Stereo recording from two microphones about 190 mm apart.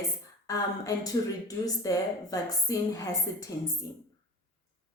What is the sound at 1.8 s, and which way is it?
A woman's voice, 20° left (ahead or behind).